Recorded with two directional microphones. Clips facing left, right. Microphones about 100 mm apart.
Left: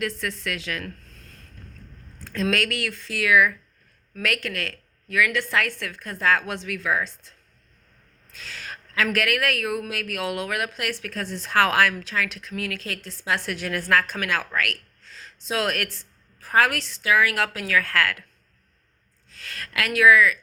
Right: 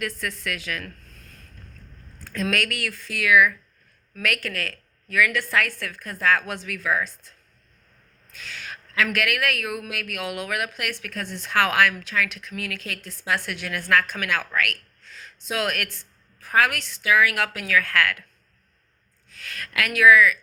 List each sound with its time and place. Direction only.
0.0 s a woman's voice: 30° left (ahead or behind)
2.2 s a woman's voice: 30° left (ahead or behind)
19.3 s a woman's voice: 30° left (ahead or behind)